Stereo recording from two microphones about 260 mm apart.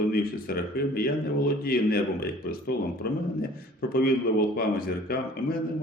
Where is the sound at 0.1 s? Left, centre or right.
Left.